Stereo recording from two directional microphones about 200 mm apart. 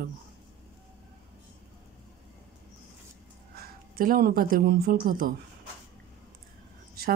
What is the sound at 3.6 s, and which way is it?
Speech, 45° right (ahead or behind).